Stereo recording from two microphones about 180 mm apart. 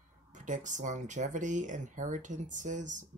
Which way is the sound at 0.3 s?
45° right (ahead or behind).